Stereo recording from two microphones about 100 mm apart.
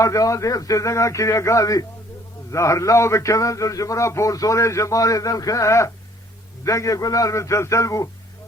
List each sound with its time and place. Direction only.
0.0 s a man's voice: 30° left (ahead or behind)